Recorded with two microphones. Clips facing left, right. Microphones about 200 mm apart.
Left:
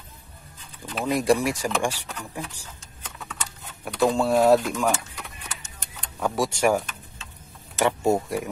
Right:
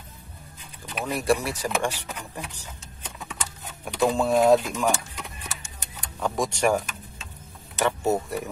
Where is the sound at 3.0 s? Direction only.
15° right (ahead or behind).